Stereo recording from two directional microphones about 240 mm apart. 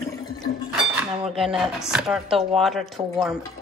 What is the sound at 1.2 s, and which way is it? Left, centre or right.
Speech, centre.